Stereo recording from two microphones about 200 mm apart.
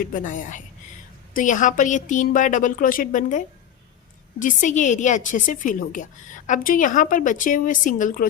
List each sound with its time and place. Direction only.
0.0 s a woman's voice: 40° left (ahead or behind)